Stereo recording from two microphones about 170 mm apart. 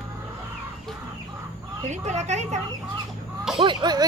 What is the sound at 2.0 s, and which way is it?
Speech, 40° right (ahead or behind).